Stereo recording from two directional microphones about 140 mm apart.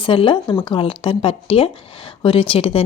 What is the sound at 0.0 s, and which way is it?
Speech, 40° left (ahead or behind).